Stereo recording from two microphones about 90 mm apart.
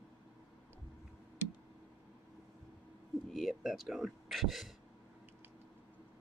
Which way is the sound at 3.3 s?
5° right (ahead or behind).